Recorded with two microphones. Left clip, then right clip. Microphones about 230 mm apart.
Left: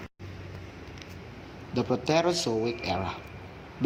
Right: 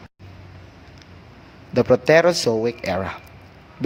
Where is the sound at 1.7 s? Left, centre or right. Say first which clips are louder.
Right 11 dB; right.